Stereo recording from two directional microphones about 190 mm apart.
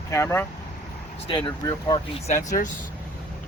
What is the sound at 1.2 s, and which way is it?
Speech, 25° left (ahead or behind).